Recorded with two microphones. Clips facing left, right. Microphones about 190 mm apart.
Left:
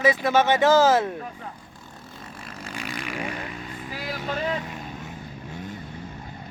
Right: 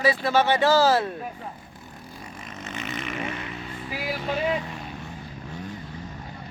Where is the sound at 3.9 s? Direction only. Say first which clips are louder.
Right 2 dB; 10° right (ahead or behind).